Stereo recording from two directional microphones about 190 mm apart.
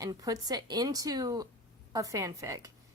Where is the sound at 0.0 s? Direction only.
20° right (ahead or behind).